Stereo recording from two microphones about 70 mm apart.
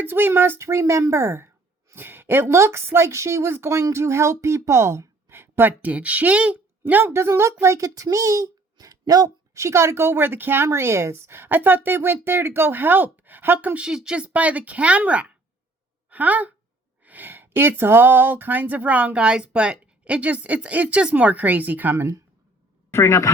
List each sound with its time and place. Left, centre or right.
0.0 s a woman's voice: right
7.1 s a woman's voice: right
9.6 s a woman's voice: right
13.7 s speech: centre
21.9 s speech: right
22.9 s speech: left